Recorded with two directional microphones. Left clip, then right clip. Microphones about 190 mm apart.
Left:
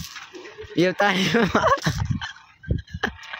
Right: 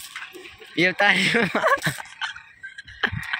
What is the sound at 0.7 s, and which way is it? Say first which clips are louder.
Speech: right 1 dB; 40° left (ahead or behind).